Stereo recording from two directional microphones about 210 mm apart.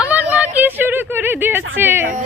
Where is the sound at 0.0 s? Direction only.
5° right (ahead or behind).